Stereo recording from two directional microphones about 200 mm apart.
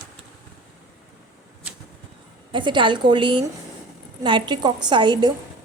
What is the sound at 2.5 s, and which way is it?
Speech, 25° right (ahead or behind).